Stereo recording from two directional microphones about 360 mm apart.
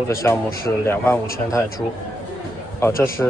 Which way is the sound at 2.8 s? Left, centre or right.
Centre.